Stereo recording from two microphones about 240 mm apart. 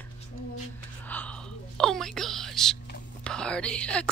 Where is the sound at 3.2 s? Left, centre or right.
Centre.